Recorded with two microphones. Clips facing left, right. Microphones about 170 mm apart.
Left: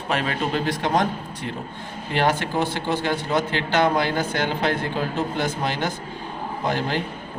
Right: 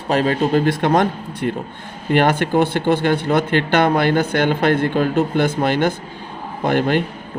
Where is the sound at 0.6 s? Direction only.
55° right (ahead or behind).